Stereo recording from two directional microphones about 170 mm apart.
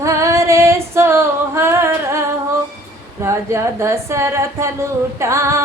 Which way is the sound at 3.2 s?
15° right (ahead or behind).